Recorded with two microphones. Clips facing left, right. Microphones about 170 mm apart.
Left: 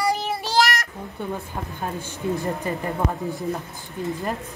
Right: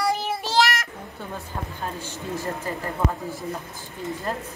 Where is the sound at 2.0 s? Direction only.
55° left (ahead or behind).